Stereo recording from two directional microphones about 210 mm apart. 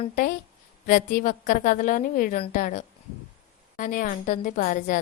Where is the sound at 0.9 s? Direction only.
40° left (ahead or behind).